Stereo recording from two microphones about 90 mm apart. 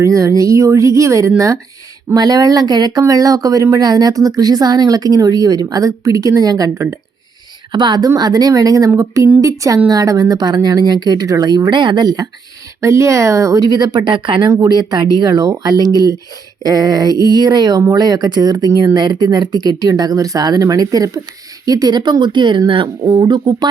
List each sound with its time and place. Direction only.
0.0 s speech: 40° right (ahead or behind)
2.1 s speech: 45° right (ahead or behind)
7.7 s speech: 55° right (ahead or behind)
12.8 s speech: 35° right (ahead or behind); by 14.5 s 65° right (ahead or behind)
14.5 s speech: 45° right (ahead or behind)